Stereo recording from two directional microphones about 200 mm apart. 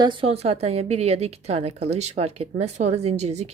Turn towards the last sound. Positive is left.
turn(degrees=-35)  # may be behind; listen again after turning